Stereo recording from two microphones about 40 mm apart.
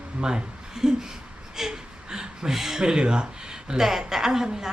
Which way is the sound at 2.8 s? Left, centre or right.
Right.